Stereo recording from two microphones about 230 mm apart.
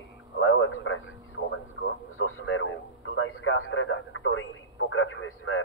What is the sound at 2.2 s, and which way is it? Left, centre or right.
Radio, left.